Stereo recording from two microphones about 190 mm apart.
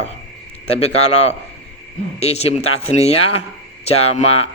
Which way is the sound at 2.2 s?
35° left (ahead or behind).